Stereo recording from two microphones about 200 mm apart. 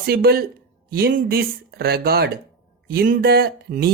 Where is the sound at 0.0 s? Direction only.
50° right (ahead or behind).